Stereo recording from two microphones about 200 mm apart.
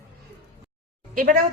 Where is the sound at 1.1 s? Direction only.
40° right (ahead or behind).